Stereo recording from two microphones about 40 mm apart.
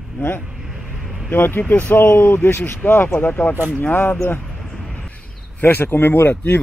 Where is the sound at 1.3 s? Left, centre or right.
Left.